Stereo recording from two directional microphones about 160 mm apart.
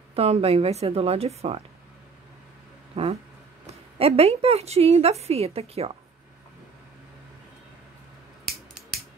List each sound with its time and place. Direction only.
0.1 s a woman's voice: 40° right (ahead or behind)
2.9 s a woman's voice: 40° right (ahead or behind)